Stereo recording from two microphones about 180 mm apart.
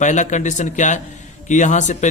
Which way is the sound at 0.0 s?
40° left (ahead or behind).